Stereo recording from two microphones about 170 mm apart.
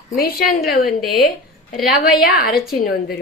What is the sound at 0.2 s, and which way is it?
Speech, 60° left (ahead or behind).